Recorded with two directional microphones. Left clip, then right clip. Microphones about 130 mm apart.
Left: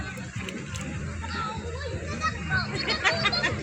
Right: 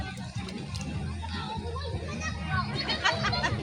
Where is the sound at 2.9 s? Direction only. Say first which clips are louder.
Left 3 dB; 5° right (ahead or behind).